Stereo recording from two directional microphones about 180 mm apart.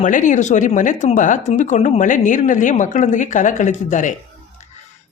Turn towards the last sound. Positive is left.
turn(degrees=40)  # may be behind; listen again after turning